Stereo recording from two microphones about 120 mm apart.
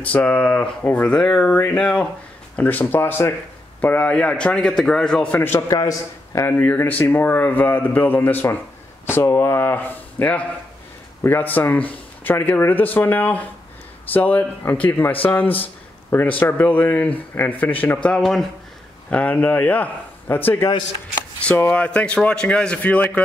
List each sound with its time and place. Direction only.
0.0 s speech: 10° left (ahead or behind)
5.7 s speech: 30° left (ahead or behind)